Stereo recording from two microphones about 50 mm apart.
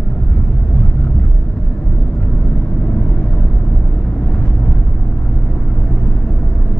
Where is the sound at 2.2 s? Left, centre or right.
Centre.